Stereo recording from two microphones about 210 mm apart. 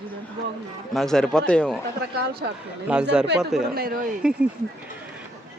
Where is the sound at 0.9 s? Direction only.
Centre (ahead or behind).